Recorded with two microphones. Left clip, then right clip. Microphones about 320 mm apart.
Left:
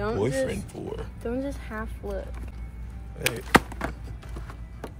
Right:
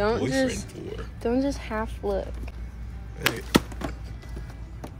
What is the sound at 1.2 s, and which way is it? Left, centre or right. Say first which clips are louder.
Speech: right 7 dB; right.